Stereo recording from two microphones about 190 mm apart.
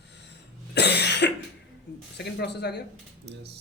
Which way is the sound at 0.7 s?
60° left (ahead or behind).